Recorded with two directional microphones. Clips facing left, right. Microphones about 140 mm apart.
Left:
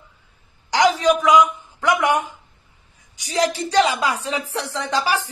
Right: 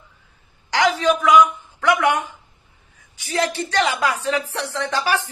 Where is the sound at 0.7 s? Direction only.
15° left (ahead or behind).